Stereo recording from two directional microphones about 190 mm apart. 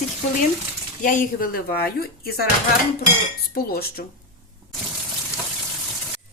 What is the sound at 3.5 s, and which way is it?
Speech, 50° left (ahead or behind).